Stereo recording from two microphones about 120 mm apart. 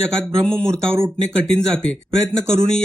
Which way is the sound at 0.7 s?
20° right (ahead or behind).